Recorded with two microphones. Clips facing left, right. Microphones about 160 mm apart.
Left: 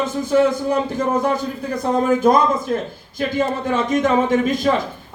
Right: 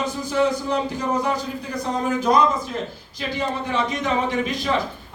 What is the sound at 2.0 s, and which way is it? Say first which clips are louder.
A man's voice: left 3 dB; 50° left (ahead or behind).